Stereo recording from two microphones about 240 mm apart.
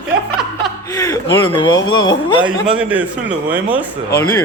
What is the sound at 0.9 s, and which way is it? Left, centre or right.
Speech, centre.